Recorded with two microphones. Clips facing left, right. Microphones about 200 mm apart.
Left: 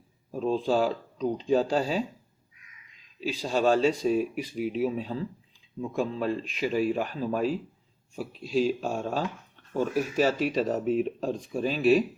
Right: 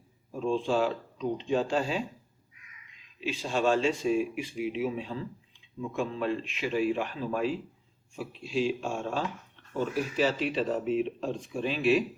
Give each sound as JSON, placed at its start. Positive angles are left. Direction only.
{"t": 0.3, "sound": "speech", "side_deg": 40}
{"t": 3.2, "sound": "speech", "side_deg": 40}